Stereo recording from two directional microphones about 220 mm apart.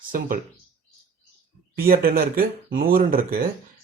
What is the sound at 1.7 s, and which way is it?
Speech, 45° right (ahead or behind).